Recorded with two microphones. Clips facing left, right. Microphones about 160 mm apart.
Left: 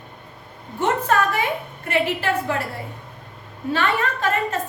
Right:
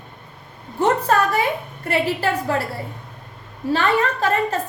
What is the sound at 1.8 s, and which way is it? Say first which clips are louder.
Speech: right 1 dB; 35° right (ahead or behind).